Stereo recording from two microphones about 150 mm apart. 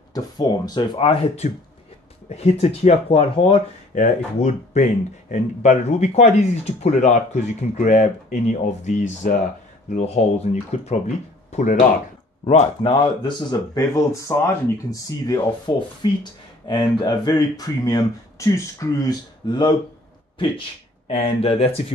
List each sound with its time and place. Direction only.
0.1 s speech: 25° left (ahead or behind)
3.9 s speech: 50° left (ahead or behind); by 19.7 s 30° left (ahead or behind)
21.1 s speech: 40° left (ahead or behind)